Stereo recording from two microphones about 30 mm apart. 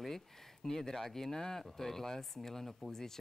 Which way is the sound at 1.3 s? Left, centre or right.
Left.